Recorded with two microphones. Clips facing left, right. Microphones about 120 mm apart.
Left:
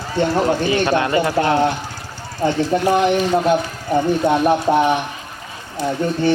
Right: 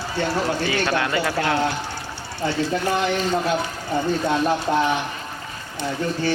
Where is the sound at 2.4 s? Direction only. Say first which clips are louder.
Left 6 dB; 45° left (ahead or behind).